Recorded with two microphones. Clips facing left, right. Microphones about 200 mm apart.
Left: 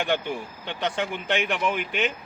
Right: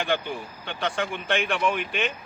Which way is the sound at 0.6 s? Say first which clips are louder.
Even; 20° left (ahead or behind).